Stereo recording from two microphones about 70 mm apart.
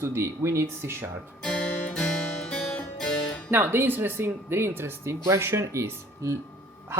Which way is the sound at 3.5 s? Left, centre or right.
Right.